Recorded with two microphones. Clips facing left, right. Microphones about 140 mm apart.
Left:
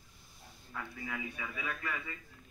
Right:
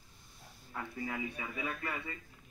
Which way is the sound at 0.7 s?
30° right (ahead or behind).